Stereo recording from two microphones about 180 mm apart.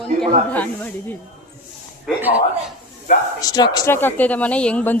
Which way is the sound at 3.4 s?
20° left (ahead or behind).